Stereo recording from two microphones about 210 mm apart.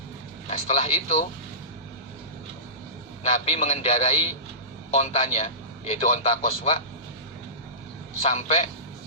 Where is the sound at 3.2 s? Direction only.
30° left (ahead or behind).